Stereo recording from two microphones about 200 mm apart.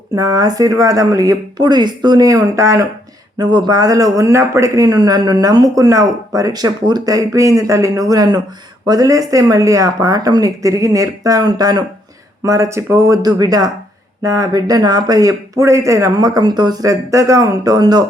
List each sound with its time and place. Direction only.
0.2 s speech: 20° right (ahead or behind)